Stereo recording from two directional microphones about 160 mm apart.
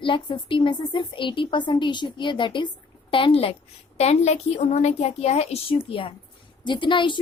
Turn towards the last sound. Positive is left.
turn(degrees=30)  # may be behind; listen again after turning